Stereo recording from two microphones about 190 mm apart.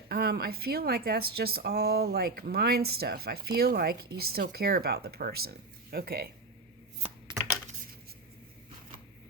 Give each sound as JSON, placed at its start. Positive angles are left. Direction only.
{"t": 0.1, "sound": "speech", "side_deg": -55}